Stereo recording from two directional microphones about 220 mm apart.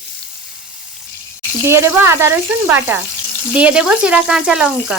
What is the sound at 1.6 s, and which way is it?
A woman's voice, 10° right (ahead or behind).